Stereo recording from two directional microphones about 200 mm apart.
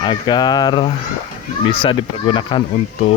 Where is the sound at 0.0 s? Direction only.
20° left (ahead or behind).